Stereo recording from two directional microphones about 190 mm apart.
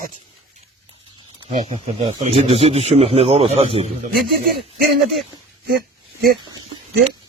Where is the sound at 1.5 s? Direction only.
35° right (ahead or behind).